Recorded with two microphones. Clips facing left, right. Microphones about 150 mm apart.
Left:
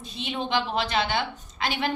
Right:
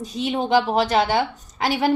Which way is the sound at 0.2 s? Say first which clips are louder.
Right 8 dB; 45° right (ahead or behind).